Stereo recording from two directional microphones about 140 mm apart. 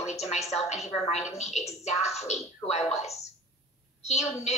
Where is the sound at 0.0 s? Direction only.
55° left (ahead or behind).